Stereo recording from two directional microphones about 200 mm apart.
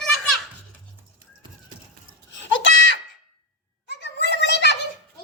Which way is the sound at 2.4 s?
70° left (ahead or behind).